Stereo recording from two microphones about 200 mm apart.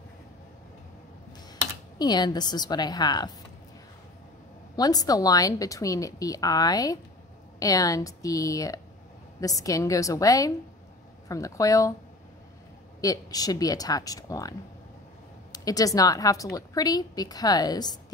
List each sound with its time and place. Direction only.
2.0 s a woman's voice: 20° left (ahead or behind)
4.7 s a woman's voice: 20° left (ahead or behind)
13.0 s a woman's voice: 20° left (ahead or behind)
15.5 s a woman's voice: 20° left (ahead or behind)